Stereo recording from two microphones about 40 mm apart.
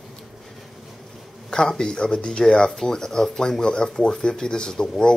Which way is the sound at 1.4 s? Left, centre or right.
Centre.